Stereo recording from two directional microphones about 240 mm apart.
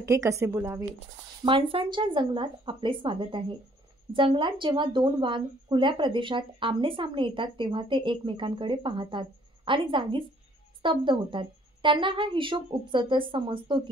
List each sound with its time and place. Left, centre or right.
0.0 s a woman's voice: centre